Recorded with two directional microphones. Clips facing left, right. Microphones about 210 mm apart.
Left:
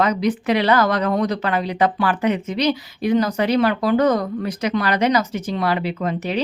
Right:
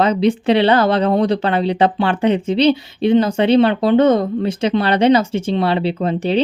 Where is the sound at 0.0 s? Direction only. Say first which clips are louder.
Right 4 dB; 30° right (ahead or behind).